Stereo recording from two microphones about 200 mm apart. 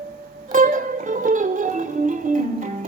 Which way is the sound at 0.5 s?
40° right (ahead or behind).